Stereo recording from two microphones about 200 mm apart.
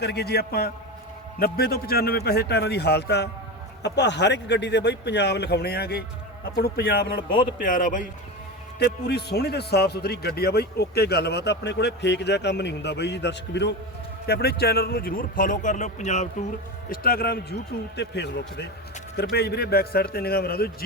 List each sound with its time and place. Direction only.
0.0 s a man's voice: 55° left (ahead or behind)
8.8 s a man's voice: 55° left (ahead or behind); by 16.5 s 35° left (ahead or behind)
16.9 s a man's voice: 50° left (ahead or behind)